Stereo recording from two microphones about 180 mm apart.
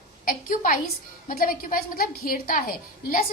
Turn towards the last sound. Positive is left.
turn(degrees=50)  # may be behind; listen again after turning